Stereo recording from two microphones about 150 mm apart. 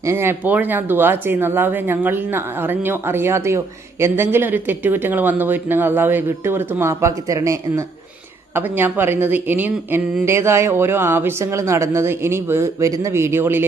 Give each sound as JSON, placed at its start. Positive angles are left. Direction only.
{"t": 0.0, "sound": "a woman's voice", "side_deg": -15}